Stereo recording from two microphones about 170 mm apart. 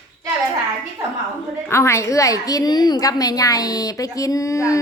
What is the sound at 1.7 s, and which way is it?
A woman's voice, 15° left (ahead or behind).